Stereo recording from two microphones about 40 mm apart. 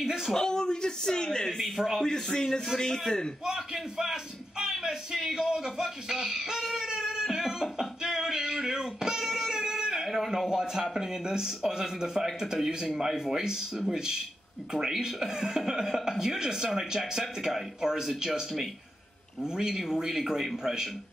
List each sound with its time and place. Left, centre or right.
0.0 s a sound: centre
0.3 s speech: centre
1.6 s a man's voice: centre
2.0 s a man's voice: centre
3.4 s a man's voice: centre
7.8 s a sound: centre
10.0 s a man's voice: centre